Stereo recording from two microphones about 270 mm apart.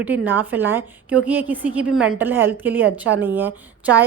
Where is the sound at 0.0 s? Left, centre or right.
Centre.